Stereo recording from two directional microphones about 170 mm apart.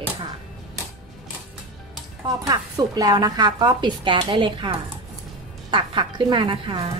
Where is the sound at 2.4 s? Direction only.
25° right (ahead or behind).